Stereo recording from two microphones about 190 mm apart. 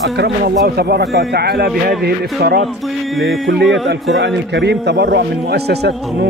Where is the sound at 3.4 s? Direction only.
70° right (ahead or behind).